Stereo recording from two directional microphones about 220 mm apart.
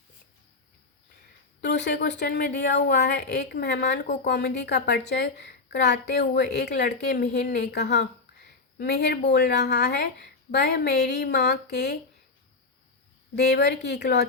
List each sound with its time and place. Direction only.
1.6 s a woman's voice: 50° left (ahead or behind)
13.3 s a woman's voice: 50° left (ahead or behind)